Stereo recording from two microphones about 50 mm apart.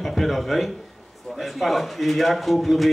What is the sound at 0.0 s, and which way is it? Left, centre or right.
Speech, centre.